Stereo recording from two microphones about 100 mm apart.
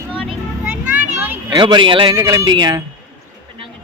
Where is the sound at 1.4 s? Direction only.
50° right (ahead or behind).